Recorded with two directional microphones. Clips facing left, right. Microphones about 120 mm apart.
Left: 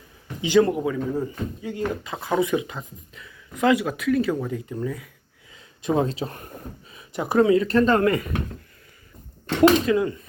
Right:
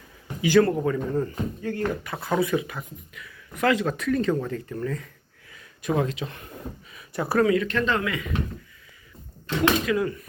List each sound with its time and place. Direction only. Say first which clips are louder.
0.4 s speech: left 1 dB; 15° left (ahead or behind)
0.8 s speech: even; 5° left (ahead or behind)
5.8 s speech: left 3 dB; 30° left (ahead or behind)
6.9 s speech: left 3 dB; 20° left (ahead or behind); by 8.2 s 45° left (ahead or behind)
9.8 s speech: left 3 dB; 25° left (ahead or behind)